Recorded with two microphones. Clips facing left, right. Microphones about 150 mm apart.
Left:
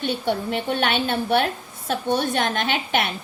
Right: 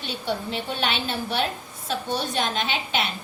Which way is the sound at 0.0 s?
55° left (ahead or behind).